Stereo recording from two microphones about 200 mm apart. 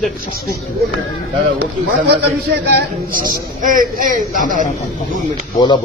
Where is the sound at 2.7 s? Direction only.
50° right (ahead or behind).